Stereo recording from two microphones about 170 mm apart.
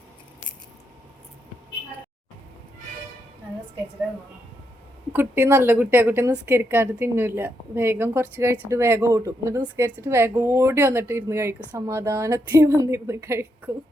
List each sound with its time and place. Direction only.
5.1 s a woman's voice: 10° right (ahead or behind)